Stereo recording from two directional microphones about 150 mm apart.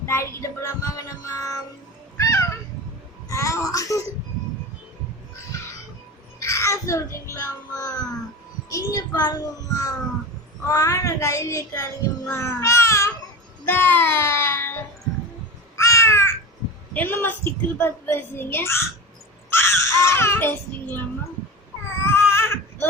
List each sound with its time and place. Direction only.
0.0 s music: 20° left (ahead or behind)
2.1 s cat: 20° left (ahead or behind)
3.2 s music: 20° left (ahead or behind)
6.4 s a sound: 20° left (ahead or behind)
10.7 s a child's voice: 25° left (ahead or behind)
13.7 s music: 10° left (ahead or behind)
15.7 s crow: 20° left (ahead or behind)
16.9 s a sound: 10° left (ahead or behind)
22.0 s baby cry: 15° left (ahead or behind)